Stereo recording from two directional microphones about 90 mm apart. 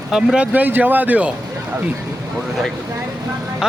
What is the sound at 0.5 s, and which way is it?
Speech, 20° right (ahead or behind).